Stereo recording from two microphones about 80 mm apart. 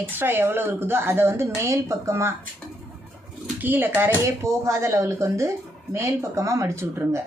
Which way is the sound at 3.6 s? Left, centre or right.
Right.